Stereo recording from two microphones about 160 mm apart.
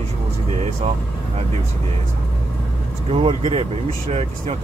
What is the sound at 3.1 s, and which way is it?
Speech, 35° right (ahead or behind).